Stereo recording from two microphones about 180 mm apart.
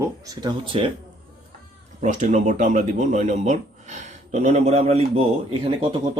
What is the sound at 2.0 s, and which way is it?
Speech, 40° right (ahead or behind).